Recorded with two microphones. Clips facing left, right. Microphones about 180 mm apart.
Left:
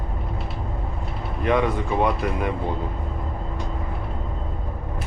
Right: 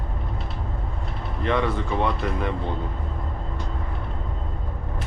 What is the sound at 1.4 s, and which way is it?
Speech, 15° left (ahead or behind).